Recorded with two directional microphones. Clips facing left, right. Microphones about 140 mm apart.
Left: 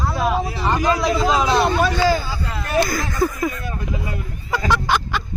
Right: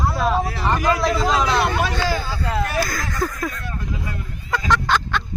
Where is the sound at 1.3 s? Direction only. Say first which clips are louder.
Left 2 dB; 20° left (ahead or behind).